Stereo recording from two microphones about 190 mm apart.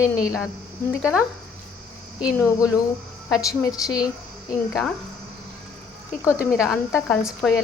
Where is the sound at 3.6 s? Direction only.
20° left (ahead or behind).